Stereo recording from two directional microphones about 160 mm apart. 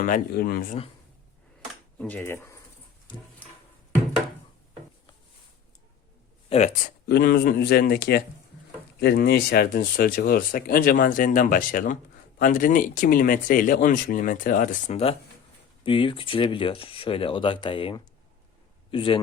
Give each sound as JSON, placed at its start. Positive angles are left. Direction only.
{"t": 0.0, "sound": "speech", "side_deg": 65}
{"t": 2.0, "sound": "speech", "side_deg": 10}
{"t": 6.5, "sound": "speech", "side_deg": 45}
{"t": 7.1, "sound": "speech", "side_deg": 75}
{"t": 15.8, "sound": "speech", "side_deg": 30}